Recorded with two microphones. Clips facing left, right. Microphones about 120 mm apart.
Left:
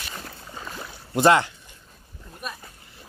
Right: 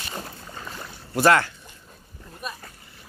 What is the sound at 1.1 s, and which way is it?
Speech, 20° left (ahead or behind).